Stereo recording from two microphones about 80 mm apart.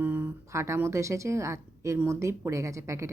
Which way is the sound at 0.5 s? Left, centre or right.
Right.